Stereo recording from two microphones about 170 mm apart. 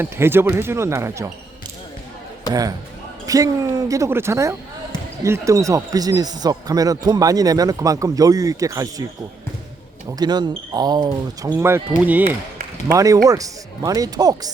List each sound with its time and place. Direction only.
0.0 s speech: 15° right (ahead or behind)
2.5 s speech: 20° right (ahead or behind)
10.1 s speech: 25° right (ahead or behind)
11.5 s speech: 15° right (ahead or behind)